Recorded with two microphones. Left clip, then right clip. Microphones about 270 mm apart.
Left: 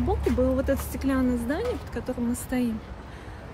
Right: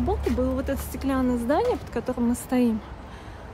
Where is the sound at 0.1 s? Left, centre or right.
Centre.